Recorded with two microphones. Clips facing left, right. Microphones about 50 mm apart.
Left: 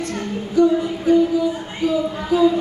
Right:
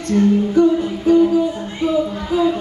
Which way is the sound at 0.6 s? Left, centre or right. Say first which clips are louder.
Right 1 dB; right.